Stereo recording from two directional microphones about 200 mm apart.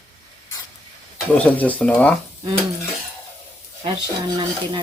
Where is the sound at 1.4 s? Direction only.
5° left (ahead or behind).